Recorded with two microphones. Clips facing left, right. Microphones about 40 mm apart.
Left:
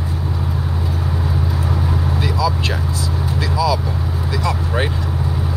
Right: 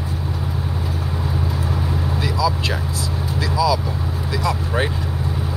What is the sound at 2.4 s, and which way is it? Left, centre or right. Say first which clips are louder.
Speech: even; centre.